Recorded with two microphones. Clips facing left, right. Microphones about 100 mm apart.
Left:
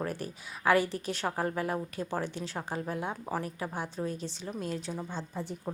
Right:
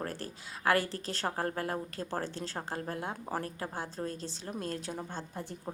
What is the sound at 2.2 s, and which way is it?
Speech, 35° right (ahead or behind).